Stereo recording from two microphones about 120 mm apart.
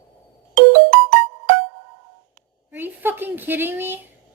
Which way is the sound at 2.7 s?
15° right (ahead or behind).